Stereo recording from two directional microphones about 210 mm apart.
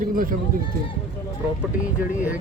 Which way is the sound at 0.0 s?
40° right (ahead or behind).